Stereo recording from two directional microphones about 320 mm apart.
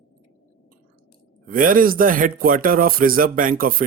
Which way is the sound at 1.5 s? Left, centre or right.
Right.